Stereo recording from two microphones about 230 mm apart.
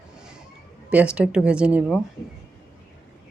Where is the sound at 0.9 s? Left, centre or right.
Centre.